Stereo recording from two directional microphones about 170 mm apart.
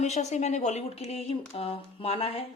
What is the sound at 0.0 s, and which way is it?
A woman's voice, 40° left (ahead or behind).